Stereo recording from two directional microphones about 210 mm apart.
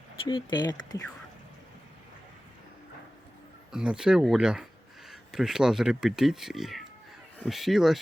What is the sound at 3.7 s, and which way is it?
Speech, 5° right (ahead or behind).